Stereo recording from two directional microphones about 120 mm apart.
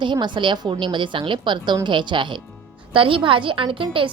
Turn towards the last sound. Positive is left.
turn(degrees=-45)  # may be behind; listen again after turning